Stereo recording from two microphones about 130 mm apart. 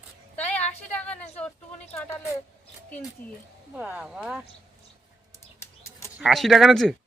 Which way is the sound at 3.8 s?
10° right (ahead or behind).